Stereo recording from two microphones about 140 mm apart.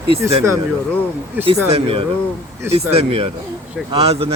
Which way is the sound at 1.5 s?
40° right (ahead or behind).